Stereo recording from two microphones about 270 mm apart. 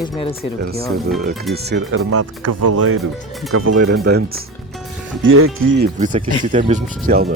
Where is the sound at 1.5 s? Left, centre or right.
Right.